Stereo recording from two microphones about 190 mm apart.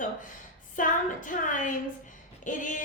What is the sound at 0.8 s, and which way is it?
A woman's voice, 45° left (ahead or behind).